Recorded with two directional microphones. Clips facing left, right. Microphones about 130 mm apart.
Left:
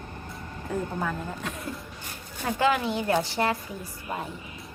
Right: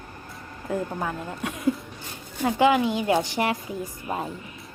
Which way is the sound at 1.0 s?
15° right (ahead or behind).